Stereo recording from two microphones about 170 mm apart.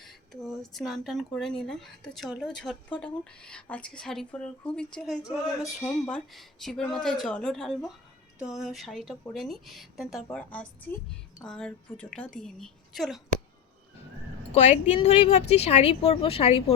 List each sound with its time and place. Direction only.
0.0 s a woman's voice: centre (ahead or behind)
14.5 s speech: 40° left (ahead or behind)
14.9 s speech: 30° left (ahead or behind)